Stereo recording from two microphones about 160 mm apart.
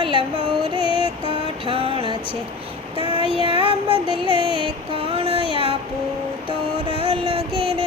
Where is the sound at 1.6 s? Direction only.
35° right (ahead or behind).